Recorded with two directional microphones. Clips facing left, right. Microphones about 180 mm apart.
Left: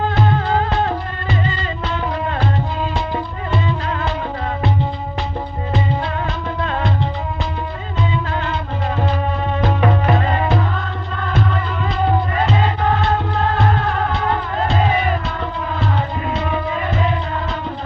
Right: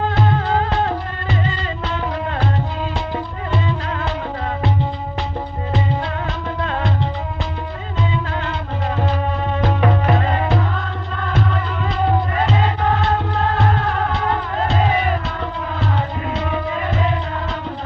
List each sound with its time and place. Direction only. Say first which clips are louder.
0.0 s music: left 1 dB; 35° right (ahead or behind)
3.1 s music: left 1 dB; 40° right (ahead or behind)
6.6 s music: left 1 dB; 40° right (ahead or behind)
8.3 s music: left 2 dB; 35° right (ahead or behind)
9.6 s music: left 1 dB; 35° right (ahead or behind)
16.3 s music: left 1 dB; 40° right (ahead or behind)